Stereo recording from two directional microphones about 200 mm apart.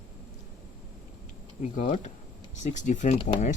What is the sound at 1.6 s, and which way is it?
Speech, 40° left (ahead or behind).